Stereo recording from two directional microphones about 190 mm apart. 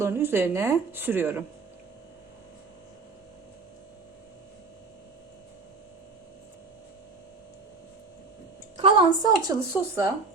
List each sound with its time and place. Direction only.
0.0 s speech: 10° right (ahead or behind)
8.8 s a woman's voice: 25° right (ahead or behind)